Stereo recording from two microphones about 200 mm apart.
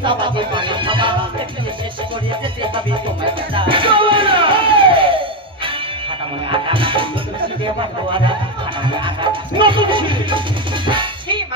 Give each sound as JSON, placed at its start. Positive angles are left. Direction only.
{"t": 0.0, "sound": "music", "side_deg": -25}
{"t": 3.5, "sound": "music", "side_deg": -25}
{"t": 6.5, "sound": "music", "side_deg": -25}